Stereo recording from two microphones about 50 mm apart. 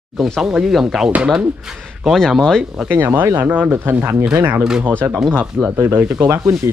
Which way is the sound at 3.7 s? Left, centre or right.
Right.